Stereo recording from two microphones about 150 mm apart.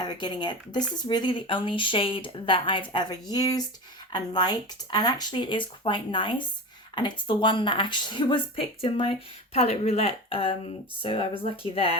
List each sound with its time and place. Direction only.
0.0 s speech: 30° left (ahead or behind)